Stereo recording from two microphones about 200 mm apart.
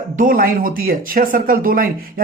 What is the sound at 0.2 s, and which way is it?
A man's voice, 45° right (ahead or behind).